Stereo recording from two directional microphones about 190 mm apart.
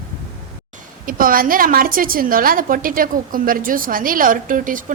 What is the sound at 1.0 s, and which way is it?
A woman's voice, 50° right (ahead or behind).